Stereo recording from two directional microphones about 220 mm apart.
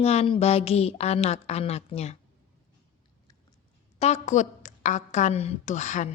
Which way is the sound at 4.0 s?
30° left (ahead or behind).